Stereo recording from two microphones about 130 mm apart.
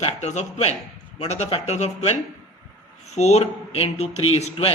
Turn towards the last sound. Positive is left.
turn(degrees=50)  # may be behind; listen again after turning